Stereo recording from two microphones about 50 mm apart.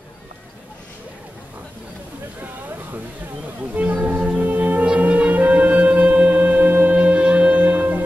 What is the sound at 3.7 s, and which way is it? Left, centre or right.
Music, right.